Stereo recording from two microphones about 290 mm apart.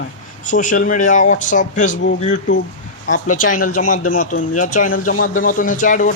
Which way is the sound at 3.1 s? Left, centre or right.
Left.